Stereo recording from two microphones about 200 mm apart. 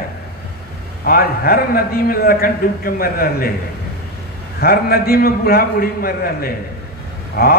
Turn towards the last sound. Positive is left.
turn(degrees=45)  # may be behind; listen again after turning